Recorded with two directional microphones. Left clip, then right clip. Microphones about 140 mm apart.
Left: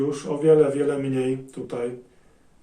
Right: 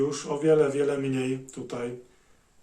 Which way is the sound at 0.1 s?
30° right (ahead or behind).